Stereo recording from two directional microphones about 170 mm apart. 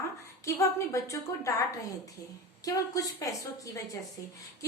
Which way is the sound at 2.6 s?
20° left (ahead or behind).